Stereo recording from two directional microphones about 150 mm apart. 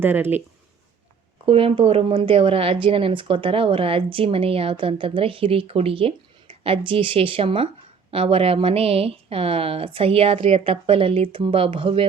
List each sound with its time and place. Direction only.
0.0 s speech: 15° right (ahead or behind)
1.5 s a woman's voice: 35° right (ahead or behind)